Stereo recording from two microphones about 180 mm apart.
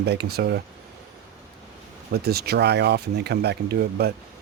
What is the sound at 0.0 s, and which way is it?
Speech, 65° right (ahead or behind).